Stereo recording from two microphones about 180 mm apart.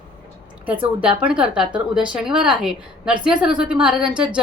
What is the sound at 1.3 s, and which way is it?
A woman's voice, 5° right (ahead or behind).